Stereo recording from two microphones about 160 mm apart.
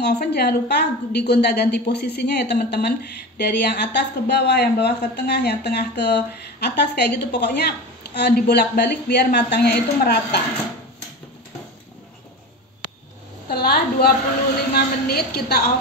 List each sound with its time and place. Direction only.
0.0 s speech: 90° left
13.5 s a woman's voice: 80° left